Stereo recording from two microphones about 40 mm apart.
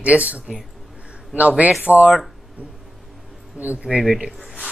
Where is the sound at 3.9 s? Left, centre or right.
Centre.